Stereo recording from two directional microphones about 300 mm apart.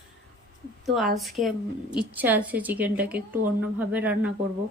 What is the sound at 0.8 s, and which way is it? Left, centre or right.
A woman's voice, centre.